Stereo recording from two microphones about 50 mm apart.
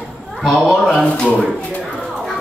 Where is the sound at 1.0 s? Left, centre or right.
Left.